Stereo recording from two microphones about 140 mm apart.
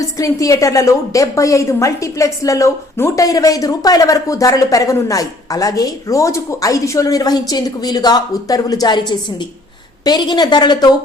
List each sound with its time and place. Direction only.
0.0 s a woman's voice: 25° left (ahead or behind)